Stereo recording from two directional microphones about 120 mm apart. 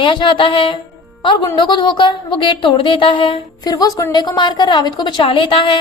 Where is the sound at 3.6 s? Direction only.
30° left (ahead or behind).